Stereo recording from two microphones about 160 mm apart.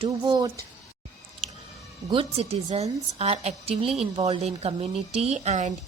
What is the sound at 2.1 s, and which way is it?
A woman's voice, 40° right (ahead or behind).